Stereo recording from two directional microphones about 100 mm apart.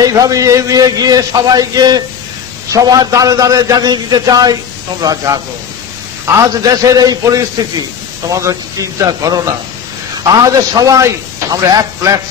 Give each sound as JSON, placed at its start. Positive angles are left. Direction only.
{"t": 0.0, "sound": "a man's voice", "side_deg": -35}